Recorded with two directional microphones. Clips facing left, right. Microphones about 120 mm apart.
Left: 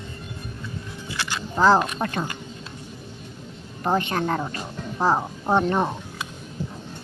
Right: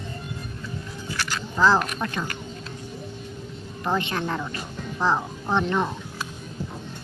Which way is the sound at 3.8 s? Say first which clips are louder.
Left 3 dB; 40° left (ahead or behind).